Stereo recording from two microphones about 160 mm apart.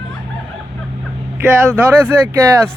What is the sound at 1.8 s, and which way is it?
Speech, 15° right (ahead or behind).